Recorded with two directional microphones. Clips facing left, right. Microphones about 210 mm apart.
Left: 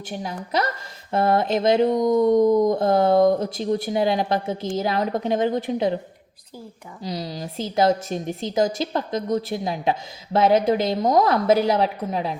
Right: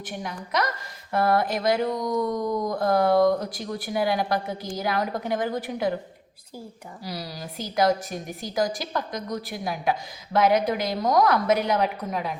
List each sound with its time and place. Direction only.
0.1 s a woman's voice: 30° left (ahead or behind)
7.0 s a woman's voice: 20° left (ahead or behind)